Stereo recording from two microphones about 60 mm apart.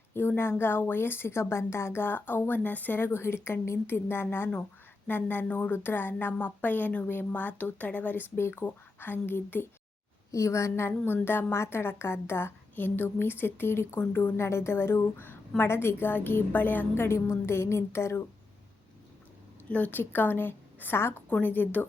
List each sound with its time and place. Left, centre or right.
0.1 s a woman's voice: left
8.4 s a sound: left
8.6 s a woman's voice: left
10.3 s a woman's voice: left
17.3 s a sound: left
19.6 s a woman's voice: left
21.2 s a woman's voice: left